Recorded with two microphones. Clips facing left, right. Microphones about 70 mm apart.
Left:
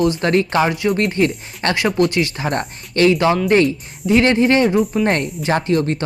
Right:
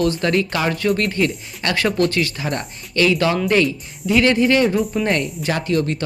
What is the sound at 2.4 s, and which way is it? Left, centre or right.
Speech, left.